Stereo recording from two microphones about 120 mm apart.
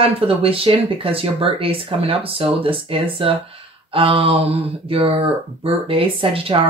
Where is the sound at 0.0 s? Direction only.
50° right (ahead or behind).